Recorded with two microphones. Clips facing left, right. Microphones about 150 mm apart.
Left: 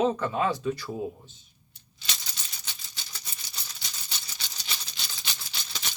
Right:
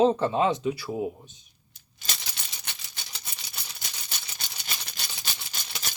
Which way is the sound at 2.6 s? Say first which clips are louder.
Right 2 dB; 60° right (ahead or behind).